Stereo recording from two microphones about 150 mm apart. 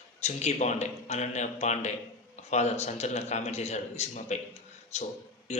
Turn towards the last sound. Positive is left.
turn(degrees=50)  # may be behind; listen again after turning